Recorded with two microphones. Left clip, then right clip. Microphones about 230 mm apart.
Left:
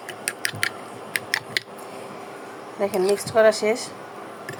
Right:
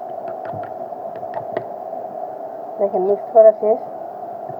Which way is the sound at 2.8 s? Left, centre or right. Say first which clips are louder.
Right 4 dB; left.